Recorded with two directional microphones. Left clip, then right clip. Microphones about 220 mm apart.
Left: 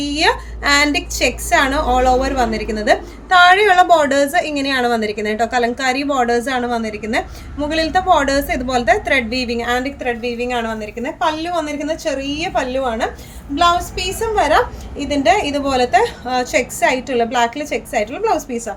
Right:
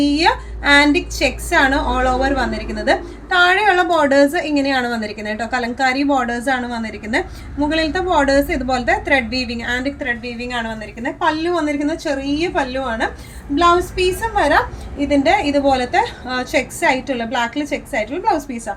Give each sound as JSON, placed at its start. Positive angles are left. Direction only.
{"t": 0.0, "sound": "a woman's voice", "side_deg": 50}